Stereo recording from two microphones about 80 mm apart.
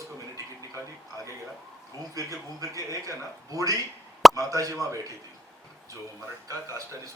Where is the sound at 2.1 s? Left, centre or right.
Right.